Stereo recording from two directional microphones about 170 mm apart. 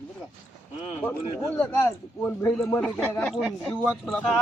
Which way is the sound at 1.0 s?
10° left (ahead or behind).